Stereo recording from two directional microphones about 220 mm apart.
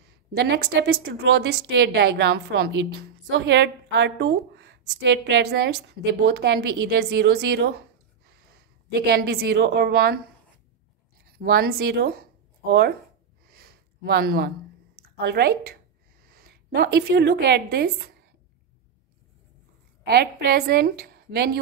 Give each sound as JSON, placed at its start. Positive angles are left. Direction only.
{"t": 0.0, "sound": "a woman's voice", "side_deg": -50}
{"t": 11.2, "sound": "speech", "side_deg": -45}
{"t": 13.5, "sound": "a sound", "side_deg": -45}
{"t": 15.1, "sound": "a woman's voice", "side_deg": -45}
{"t": 20.1, "sound": "a woman's voice", "side_deg": -45}